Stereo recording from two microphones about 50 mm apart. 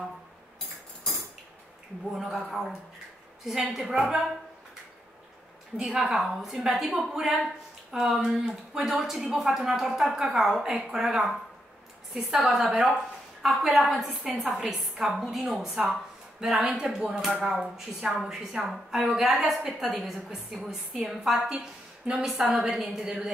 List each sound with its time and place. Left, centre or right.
2.1 s a woman's voice: centre
5.8 s a woman's voice: centre